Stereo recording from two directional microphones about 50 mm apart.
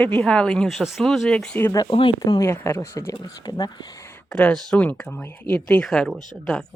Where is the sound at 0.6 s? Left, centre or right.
Centre.